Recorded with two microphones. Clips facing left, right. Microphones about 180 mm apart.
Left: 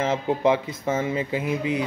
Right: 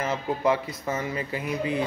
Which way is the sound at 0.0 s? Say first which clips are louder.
Left 4 dB; 25° left (ahead or behind).